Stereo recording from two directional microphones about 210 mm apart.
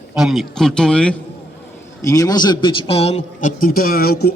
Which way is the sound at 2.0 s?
15° left (ahead or behind).